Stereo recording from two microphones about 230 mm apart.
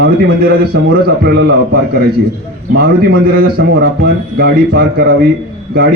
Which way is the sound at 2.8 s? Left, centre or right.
Right.